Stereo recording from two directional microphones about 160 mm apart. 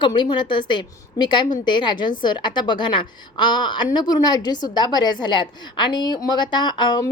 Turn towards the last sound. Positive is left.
turn(degrees=30)  # may be behind; listen again after turning